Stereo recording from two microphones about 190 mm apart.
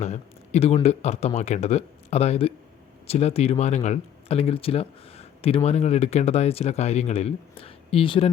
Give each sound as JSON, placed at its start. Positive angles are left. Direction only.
{"t": 0.0, "sound": "speech", "side_deg": 35}